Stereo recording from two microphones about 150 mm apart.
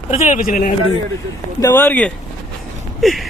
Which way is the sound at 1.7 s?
10° left (ahead or behind).